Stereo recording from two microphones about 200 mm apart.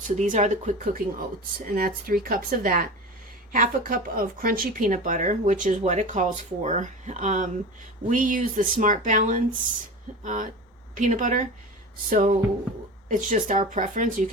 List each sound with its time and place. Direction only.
0.2 s speech: 35° right (ahead or behind)